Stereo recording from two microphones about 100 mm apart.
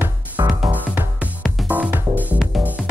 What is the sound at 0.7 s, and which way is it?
Music, 15° right (ahead or behind).